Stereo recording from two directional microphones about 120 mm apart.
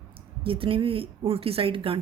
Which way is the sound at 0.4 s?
50° right (ahead or behind).